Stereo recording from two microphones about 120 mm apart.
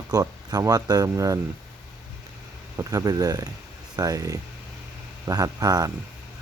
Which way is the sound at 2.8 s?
25° right (ahead or behind).